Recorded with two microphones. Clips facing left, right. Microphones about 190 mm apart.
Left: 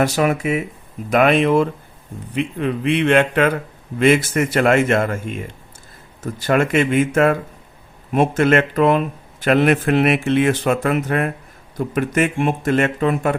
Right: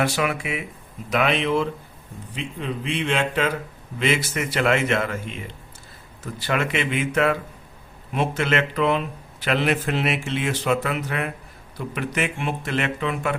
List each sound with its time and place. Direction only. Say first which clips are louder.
0.0 s speech: left 6 dB; 40° left (ahead or behind)